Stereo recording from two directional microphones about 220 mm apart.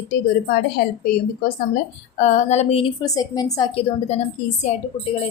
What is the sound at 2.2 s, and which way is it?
A woman's voice, 30° left (ahead or behind).